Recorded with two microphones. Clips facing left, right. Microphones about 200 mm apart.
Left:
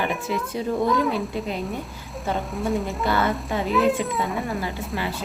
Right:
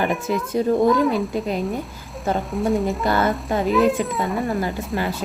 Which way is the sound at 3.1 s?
50° right (ahead or behind).